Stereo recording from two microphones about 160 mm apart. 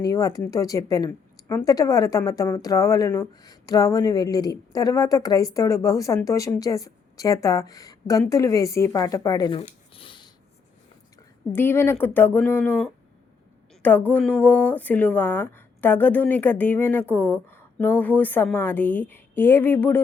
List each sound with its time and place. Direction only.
0.1 s speech: 20° left (ahead or behind)
9.5 s a sound: 35° left (ahead or behind)
11.5 s speech: 15° left (ahead or behind)